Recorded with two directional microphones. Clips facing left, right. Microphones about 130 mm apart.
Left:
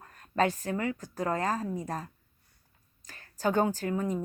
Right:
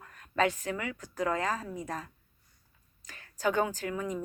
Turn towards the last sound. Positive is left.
turn(degrees=40)  # may be behind; listen again after turning